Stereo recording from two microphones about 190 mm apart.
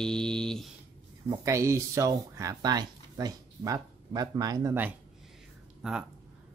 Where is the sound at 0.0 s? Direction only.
5° left (ahead or behind).